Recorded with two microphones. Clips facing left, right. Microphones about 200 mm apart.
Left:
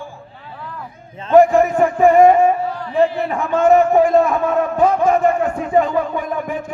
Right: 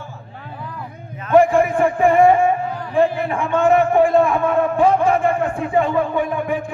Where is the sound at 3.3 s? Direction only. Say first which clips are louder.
Left 3 dB; 40° left (ahead or behind).